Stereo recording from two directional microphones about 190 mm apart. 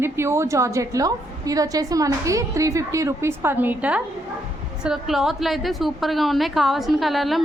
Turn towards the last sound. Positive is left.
turn(degrees=0)  # may be behind; listen again after turning